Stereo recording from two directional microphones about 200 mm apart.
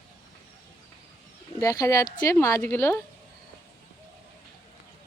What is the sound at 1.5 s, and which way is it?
A woman's voice, 15° left (ahead or behind).